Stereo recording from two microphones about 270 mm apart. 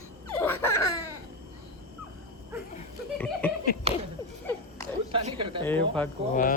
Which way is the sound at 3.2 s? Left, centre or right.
Centre.